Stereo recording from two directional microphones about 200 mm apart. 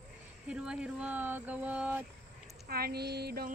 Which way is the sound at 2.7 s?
50° right (ahead or behind).